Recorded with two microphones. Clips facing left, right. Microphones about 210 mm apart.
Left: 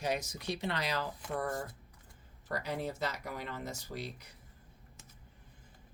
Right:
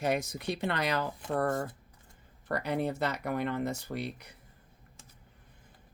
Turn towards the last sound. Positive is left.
turn(degrees=-60)  # may be behind; listen again after turning